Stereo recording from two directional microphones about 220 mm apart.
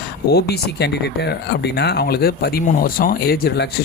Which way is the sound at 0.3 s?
45° left (ahead or behind).